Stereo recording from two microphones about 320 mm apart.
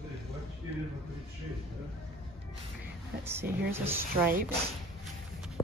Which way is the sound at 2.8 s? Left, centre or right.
Centre.